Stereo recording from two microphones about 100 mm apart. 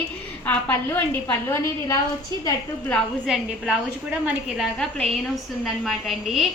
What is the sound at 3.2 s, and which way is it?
A woman's voice, 5° right (ahead or behind).